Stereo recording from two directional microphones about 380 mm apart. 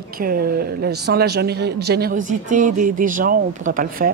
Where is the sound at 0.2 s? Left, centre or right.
Right.